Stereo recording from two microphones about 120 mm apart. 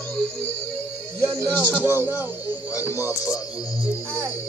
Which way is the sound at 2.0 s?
15° right (ahead or behind).